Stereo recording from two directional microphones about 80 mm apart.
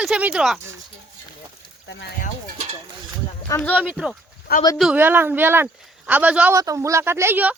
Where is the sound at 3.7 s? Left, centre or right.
Right.